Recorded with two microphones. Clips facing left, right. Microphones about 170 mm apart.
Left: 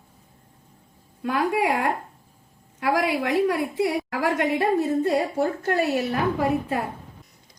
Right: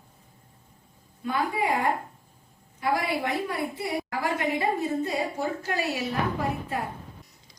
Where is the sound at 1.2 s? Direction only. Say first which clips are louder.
Left 4 dB; 85° left.